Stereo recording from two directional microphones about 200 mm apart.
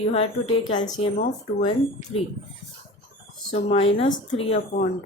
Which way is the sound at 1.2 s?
35° left (ahead or behind).